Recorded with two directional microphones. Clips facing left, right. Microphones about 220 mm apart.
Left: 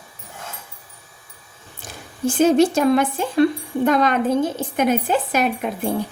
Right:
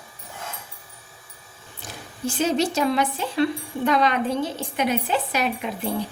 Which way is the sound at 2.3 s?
50° left (ahead or behind).